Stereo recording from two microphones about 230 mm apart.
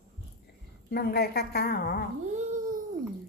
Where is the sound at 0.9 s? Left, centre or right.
Left.